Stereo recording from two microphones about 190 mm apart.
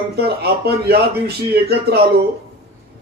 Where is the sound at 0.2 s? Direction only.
55° right (ahead or behind).